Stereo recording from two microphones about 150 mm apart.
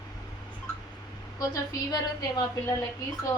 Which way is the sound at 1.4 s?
25° left (ahead or behind).